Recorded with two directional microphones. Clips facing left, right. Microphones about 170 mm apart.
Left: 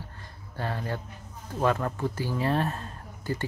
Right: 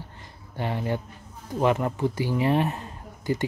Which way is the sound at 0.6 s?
15° right (ahead or behind).